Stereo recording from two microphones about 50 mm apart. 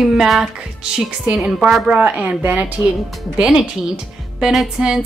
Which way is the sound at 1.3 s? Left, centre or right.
Centre.